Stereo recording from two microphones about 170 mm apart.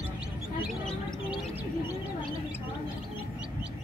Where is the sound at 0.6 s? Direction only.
Centre (ahead or behind).